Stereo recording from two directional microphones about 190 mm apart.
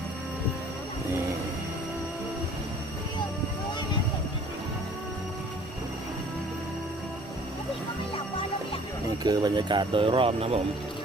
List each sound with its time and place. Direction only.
9.2 s speech: 20° right (ahead or behind)